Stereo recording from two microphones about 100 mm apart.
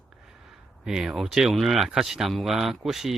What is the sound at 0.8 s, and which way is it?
Speech, 5° right (ahead or behind).